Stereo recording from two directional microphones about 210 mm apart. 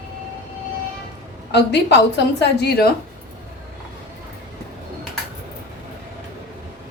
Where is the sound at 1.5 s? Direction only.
55° left (ahead or behind).